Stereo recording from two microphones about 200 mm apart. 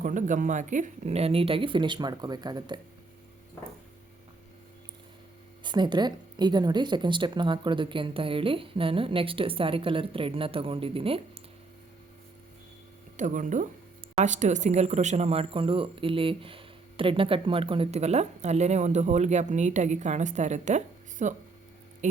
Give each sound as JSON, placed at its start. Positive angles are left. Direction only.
{"t": 0.0, "sound": "speech", "side_deg": -40}
{"t": 5.6, "sound": "speech", "side_deg": -20}
{"t": 13.1, "sound": "speech", "side_deg": -40}